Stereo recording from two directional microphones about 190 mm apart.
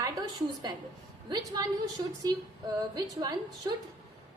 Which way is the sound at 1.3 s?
20° right (ahead or behind).